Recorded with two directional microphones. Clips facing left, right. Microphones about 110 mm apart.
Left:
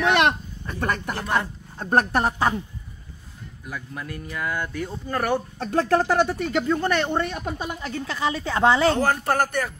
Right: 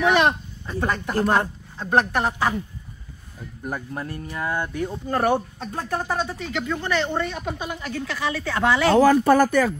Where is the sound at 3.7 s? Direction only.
35° right (ahead or behind).